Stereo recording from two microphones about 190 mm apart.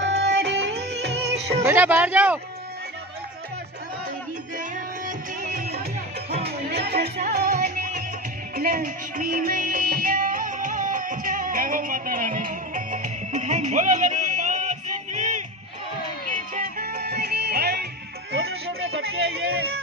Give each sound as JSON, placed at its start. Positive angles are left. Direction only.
{"t": 0.0, "sound": "music", "side_deg": -65}
{"t": 1.6, "sound": "speech", "side_deg": -10}
{"t": 4.6, "sound": "music", "side_deg": -45}
{"t": 6.7, "sound": "music", "side_deg": -60}
{"t": 16.5, "sound": "music", "side_deg": -45}
{"t": 18.3, "sound": "music", "side_deg": -75}